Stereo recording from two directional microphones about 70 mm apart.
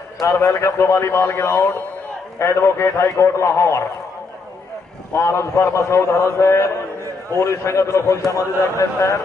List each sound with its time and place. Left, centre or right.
0.2 s a man's voice: left
5.1 s a man's voice: left